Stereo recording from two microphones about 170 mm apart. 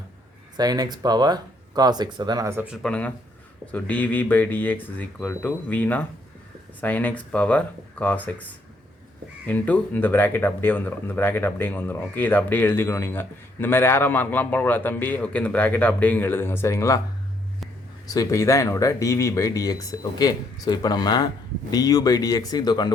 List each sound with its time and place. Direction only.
0.5 s speech: 25° right (ahead or behind); by 8.4 s 10° left (ahead or behind)
9.5 s speech: 10° left (ahead or behind)
18.1 s speech: 20° left (ahead or behind)